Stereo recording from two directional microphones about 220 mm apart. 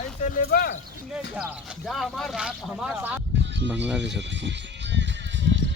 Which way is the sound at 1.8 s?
Centre (ahead or behind).